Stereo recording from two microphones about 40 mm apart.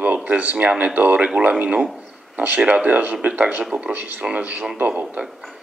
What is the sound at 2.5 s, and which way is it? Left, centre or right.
Speech, right.